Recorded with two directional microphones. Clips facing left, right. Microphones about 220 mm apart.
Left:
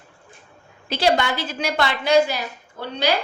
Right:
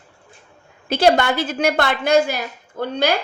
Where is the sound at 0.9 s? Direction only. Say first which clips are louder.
Right 4 dB; 50° right (ahead or behind).